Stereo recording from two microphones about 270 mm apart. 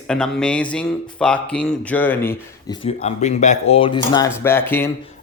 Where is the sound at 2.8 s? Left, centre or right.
Left.